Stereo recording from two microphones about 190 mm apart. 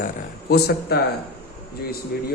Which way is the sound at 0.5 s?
60° left (ahead or behind).